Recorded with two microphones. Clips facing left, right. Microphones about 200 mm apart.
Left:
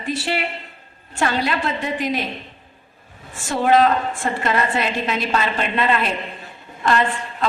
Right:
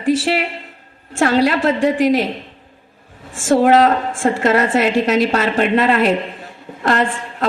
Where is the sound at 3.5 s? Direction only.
45° right (ahead or behind).